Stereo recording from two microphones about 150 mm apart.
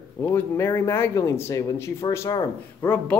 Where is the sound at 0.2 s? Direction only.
15° left (ahead or behind).